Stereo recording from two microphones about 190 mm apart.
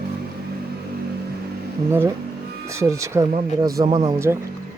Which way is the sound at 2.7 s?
15° right (ahead or behind).